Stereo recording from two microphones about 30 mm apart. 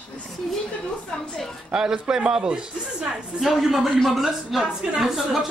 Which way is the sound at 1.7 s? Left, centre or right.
Right.